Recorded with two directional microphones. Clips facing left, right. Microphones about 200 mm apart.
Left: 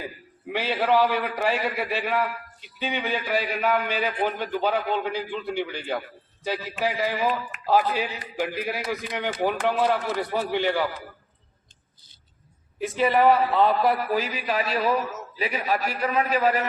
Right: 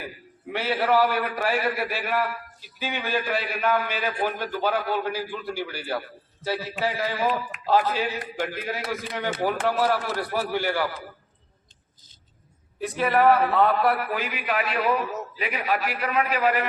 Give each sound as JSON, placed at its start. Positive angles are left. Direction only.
{"t": 0.5, "sound": "a man's voice", "side_deg": 15}
{"t": 5.5, "sound": "a man's voice", "side_deg": -5}
{"t": 6.4, "sound": "a man's voice", "side_deg": 15}
{"t": 12.8, "sound": "a man's voice", "side_deg": 0}
{"t": 14.1, "sound": "a man's voice", "side_deg": 35}